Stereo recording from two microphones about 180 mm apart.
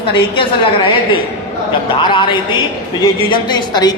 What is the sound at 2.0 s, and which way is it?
A man's voice, 30° left (ahead or behind).